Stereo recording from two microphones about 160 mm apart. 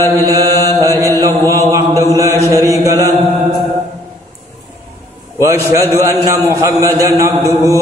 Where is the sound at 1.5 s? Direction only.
20° right (ahead or behind).